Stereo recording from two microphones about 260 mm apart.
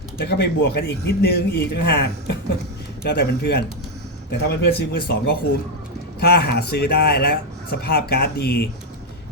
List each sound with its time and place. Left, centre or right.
0.2 s speech: left